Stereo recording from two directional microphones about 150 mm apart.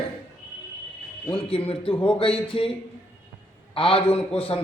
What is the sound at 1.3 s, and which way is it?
A man's voice, 40° left (ahead or behind).